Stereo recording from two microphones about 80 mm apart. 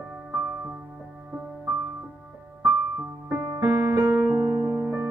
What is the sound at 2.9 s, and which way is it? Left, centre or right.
Music, right.